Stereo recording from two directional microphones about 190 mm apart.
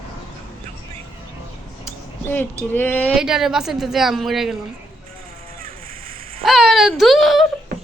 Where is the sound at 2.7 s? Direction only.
10° left (ahead or behind).